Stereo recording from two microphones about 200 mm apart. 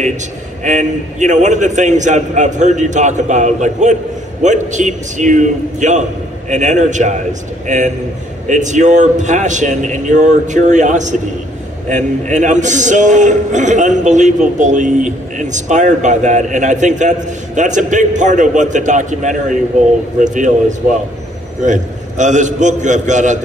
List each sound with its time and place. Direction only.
0.7 s a man's voice: 35° right (ahead or behind)